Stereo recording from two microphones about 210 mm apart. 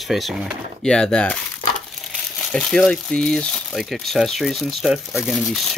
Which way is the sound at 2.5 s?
5° left (ahead or behind).